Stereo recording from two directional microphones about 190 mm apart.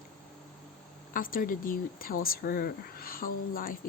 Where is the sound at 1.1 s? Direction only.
45° left (ahead or behind).